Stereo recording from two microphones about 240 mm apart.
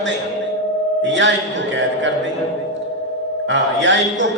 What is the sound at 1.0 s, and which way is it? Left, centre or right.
Mantra, right.